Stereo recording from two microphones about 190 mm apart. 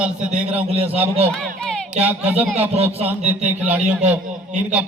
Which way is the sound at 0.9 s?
30° right (ahead or behind).